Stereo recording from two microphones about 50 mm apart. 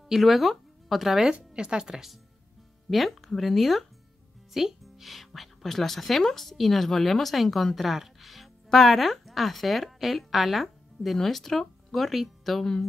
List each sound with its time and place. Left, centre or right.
0.1 s speech: centre
1.3 s speech: centre
2.9 s a woman's voice: centre